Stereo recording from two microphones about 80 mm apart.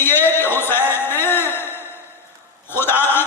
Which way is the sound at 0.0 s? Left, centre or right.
Left.